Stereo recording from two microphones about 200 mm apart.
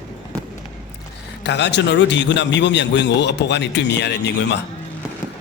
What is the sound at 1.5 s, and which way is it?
A man's voice, 60° left (ahead or behind).